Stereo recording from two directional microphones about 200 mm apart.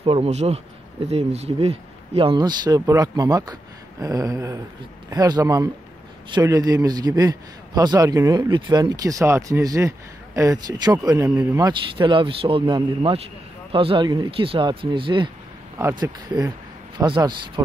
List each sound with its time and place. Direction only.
0.0 s a man's voice: 30° right (ahead or behind)
4.0 s a sound: 15° right (ahead or behind)
6.3 s a man's voice: 15° right (ahead or behind)